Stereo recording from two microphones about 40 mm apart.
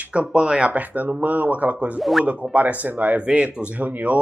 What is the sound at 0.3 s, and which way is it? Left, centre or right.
Speech, right.